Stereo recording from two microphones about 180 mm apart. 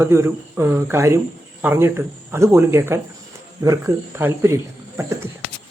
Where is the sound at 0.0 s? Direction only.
15° right (ahead or behind).